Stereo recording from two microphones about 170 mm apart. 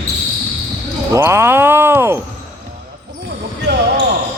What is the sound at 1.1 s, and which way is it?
Speech, 15° right (ahead or behind).